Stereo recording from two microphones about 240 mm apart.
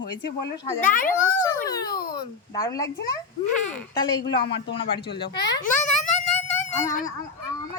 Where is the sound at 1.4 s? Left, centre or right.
Centre.